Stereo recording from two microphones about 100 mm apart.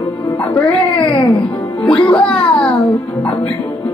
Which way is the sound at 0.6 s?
65° left (ahead or behind).